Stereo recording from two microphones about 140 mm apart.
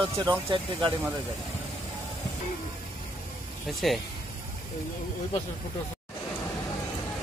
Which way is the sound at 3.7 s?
Centre (ahead or behind).